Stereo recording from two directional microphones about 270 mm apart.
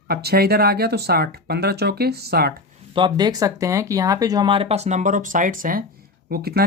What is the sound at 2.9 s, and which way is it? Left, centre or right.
Speech, centre.